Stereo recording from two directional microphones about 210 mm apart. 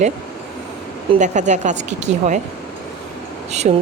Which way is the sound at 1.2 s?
35° right (ahead or behind).